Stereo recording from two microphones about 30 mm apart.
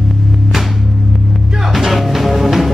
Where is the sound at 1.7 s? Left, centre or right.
Centre.